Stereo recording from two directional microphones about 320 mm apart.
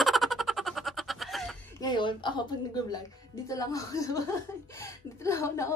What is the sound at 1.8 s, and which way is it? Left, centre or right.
Speech, centre.